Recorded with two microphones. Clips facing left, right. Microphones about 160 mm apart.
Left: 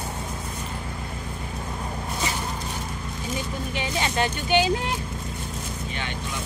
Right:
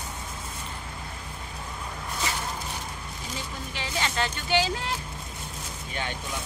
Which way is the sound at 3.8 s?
20° left (ahead or behind).